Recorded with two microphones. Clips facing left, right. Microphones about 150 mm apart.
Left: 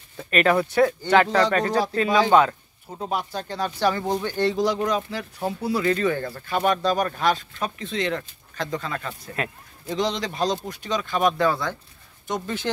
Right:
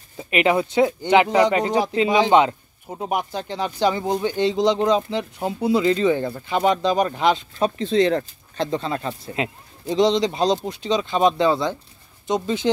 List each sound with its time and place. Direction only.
0.2 s speech: 15° right (ahead or behind)
7.5 s speech: 30° right (ahead or behind)